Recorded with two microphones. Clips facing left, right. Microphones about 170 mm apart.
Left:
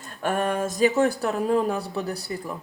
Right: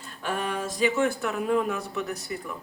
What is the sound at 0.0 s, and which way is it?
Speech, 50° left (ahead or behind).